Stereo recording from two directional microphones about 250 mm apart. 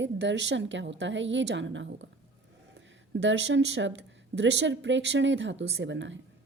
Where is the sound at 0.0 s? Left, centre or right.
Right.